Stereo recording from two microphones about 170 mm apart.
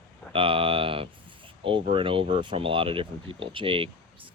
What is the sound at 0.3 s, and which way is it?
Speech, 30° right (ahead or behind).